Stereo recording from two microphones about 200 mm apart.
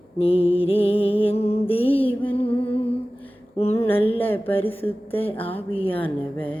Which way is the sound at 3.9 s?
30° left (ahead or behind).